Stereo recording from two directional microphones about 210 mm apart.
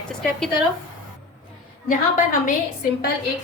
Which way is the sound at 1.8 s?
40° left (ahead or behind).